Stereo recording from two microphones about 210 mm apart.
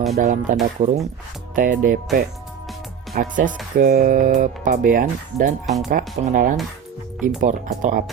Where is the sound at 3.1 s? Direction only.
40° right (ahead or behind).